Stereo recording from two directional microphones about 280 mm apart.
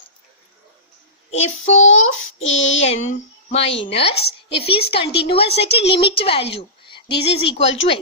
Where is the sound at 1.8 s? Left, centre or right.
Left.